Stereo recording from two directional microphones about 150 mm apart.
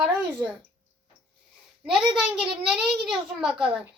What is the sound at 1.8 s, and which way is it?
A child's voice, 5° right (ahead or behind).